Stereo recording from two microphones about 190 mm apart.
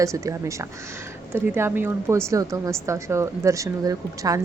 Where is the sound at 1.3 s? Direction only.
10° right (ahead or behind).